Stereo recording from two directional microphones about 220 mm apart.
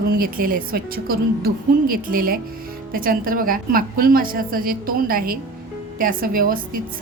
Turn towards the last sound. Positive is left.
turn(degrees=-40)  # may be behind; listen again after turning